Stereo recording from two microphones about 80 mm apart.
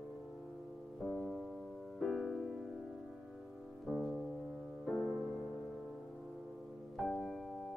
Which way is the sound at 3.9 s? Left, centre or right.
Centre.